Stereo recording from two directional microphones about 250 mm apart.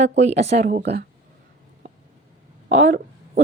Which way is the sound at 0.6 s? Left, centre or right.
Right.